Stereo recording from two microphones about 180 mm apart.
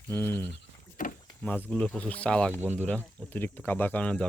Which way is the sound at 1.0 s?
50° left (ahead or behind).